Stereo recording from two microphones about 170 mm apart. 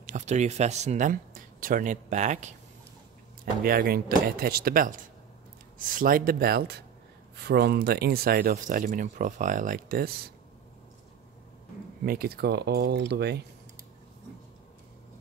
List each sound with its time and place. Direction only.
0.0 s speech: 45° right (ahead or behind)
3.6 s speech: 60° right (ahead or behind)
12.0 s speech: 65° right (ahead or behind); by 13.4 s 80° right